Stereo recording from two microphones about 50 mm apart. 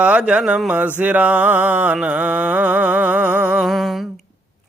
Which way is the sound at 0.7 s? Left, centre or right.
Right.